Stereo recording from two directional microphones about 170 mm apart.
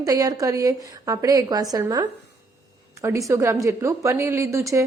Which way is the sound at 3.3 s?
20° right (ahead or behind).